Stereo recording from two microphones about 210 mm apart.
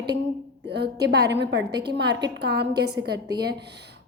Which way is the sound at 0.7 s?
50° right (ahead or behind).